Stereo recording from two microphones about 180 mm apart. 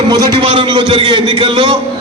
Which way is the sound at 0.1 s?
25° right (ahead or behind).